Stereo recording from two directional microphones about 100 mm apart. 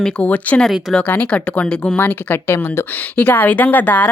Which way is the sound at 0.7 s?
Centre (ahead or behind).